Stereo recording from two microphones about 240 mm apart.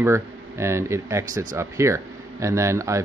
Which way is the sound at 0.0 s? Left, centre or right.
Centre.